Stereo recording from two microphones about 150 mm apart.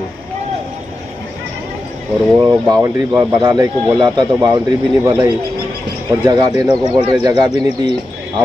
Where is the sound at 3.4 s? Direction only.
25° right (ahead or behind).